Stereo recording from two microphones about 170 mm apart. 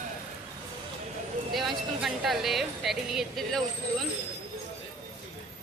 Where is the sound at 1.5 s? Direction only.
Centre (ahead or behind).